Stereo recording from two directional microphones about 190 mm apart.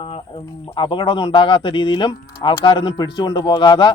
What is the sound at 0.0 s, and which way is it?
Speech, 25° left (ahead or behind).